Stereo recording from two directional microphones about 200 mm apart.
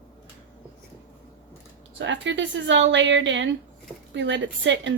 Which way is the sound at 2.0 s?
65° right (ahead or behind).